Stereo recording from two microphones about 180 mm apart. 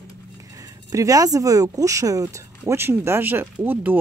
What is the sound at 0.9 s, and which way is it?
A woman's voice, 20° right (ahead or behind).